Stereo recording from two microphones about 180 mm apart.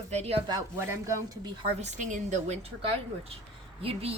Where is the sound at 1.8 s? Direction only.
40° right (ahead or behind).